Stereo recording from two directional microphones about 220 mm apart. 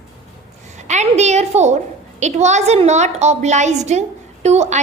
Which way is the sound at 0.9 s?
30° right (ahead or behind).